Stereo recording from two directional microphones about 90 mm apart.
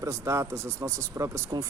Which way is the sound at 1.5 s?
50° right (ahead or behind).